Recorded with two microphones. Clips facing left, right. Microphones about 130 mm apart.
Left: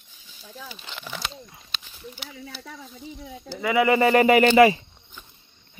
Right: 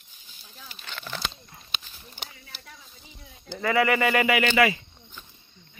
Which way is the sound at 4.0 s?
35° left (ahead or behind).